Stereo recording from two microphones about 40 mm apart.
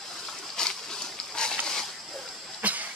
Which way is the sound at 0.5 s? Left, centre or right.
Centre.